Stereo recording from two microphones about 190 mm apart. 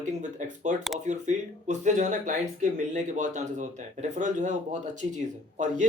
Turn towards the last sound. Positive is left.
turn(degrees=-40)  # may be behind; listen again after turning